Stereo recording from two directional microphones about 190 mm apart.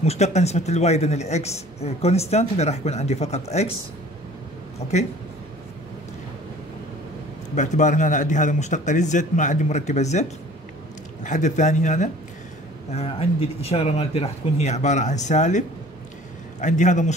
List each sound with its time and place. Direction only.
0.0 s speech: 35° left (ahead or behind)
7.5 s speech: 40° left (ahead or behind)
11.2 s speech: 40° left (ahead or behind)
16.6 s speech: 40° left (ahead or behind)